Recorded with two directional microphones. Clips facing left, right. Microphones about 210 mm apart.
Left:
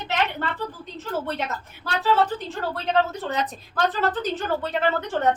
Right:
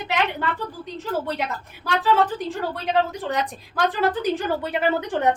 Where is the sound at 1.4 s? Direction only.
15° right (ahead or behind).